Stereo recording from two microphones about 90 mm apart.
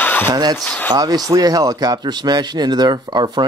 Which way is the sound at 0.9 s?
45° right (ahead or behind).